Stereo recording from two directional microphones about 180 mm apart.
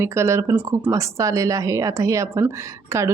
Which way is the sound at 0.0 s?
15° right (ahead or behind).